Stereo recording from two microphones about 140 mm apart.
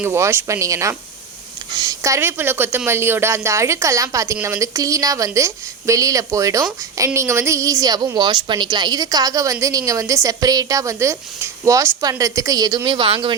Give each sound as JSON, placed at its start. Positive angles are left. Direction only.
{"t": 0.0, "sound": "a woman's voice", "side_deg": -20}